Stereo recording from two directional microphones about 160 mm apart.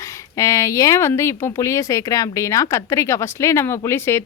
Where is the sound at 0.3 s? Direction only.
20° left (ahead or behind).